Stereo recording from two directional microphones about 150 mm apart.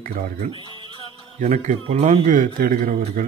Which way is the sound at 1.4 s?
50° right (ahead or behind).